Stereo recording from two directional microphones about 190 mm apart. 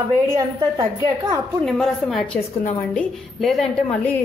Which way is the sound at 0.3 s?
20° right (ahead or behind).